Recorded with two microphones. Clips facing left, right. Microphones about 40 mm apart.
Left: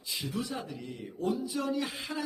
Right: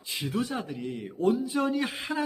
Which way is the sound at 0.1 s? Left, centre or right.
Right.